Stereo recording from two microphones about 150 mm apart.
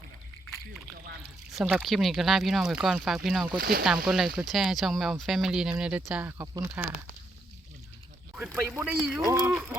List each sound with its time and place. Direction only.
1.5 s speech: 5° right (ahead or behind)
3.6 s speech: 90° right
3.8 s speech: 5° right (ahead or behind)
6.3 s speech: 20° right (ahead or behind)
8.8 s speech: centre (ahead or behind)
9.1 s speech: 20° right (ahead or behind)